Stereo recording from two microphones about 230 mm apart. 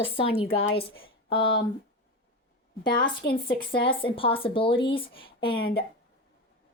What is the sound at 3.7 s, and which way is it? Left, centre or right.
Speech, left.